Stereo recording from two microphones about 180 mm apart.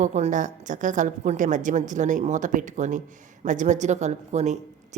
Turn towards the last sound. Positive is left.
turn(degrees=-40)  # may be behind; listen again after turning